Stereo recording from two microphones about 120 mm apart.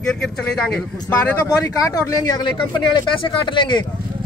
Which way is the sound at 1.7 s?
30° left (ahead or behind).